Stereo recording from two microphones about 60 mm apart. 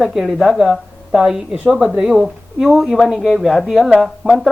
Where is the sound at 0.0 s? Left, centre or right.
Centre.